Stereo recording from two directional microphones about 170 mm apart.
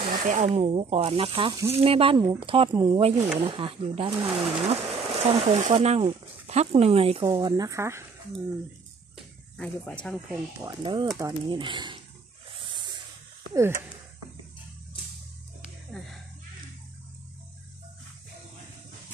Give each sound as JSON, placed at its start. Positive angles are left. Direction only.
{"t": 0.0, "sound": "speech", "side_deg": -50}
{"t": 7.2, "sound": "speech", "side_deg": -20}
{"t": 9.6, "sound": "speech", "side_deg": 5}
{"t": 10.3, "sound": "speech", "side_deg": -20}
{"t": 12.6, "sound": "spray", "side_deg": -25}